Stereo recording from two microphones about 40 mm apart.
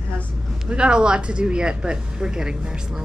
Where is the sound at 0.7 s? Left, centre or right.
Right.